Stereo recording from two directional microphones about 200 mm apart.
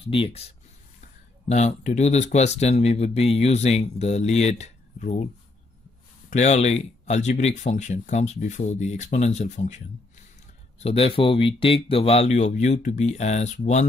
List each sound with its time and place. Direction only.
0.0 s speech: 25° left (ahead or behind)
6.3 s speech: 35° left (ahead or behind)